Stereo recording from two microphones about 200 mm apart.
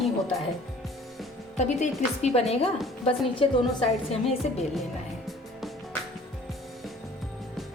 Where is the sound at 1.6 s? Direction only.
35° left (ahead or behind).